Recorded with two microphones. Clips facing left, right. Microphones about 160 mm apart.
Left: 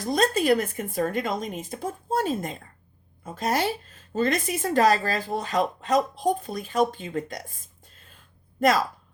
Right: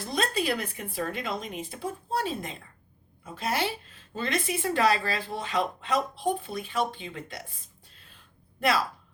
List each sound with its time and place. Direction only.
0.0 s speech: 45° left (ahead or behind)